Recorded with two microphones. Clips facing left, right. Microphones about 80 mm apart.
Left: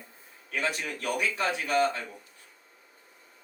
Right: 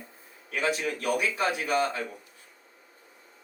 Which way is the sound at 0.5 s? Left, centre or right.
Centre.